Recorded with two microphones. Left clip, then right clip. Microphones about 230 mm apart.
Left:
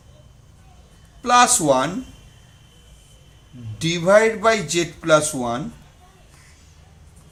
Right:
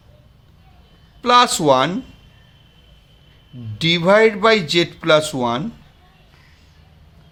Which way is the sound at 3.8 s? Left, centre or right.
Right.